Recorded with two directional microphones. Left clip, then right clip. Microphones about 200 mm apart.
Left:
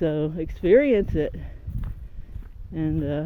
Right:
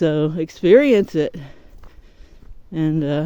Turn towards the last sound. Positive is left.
turn(degrees=-30)  # may be behind; listen again after turning